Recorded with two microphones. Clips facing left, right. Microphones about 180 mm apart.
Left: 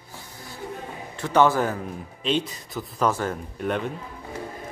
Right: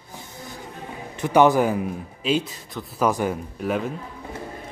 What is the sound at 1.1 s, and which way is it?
Speech, 15° right (ahead or behind).